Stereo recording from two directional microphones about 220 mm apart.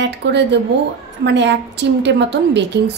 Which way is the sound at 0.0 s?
50° right (ahead or behind).